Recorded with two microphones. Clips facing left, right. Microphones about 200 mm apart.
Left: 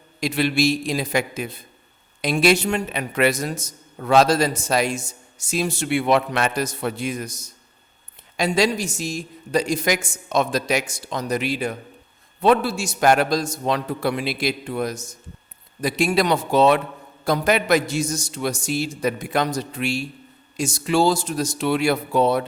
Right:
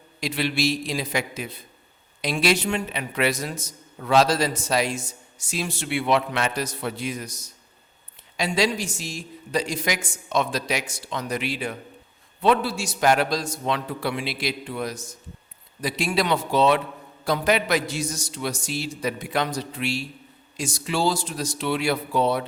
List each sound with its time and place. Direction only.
0.2 s a man's voice: 45° left (ahead or behind)
8.4 s a man's voice: 45° left (ahead or behind)